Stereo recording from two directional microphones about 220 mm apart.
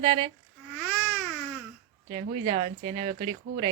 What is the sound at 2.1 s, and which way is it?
Speech, 25° right (ahead or behind).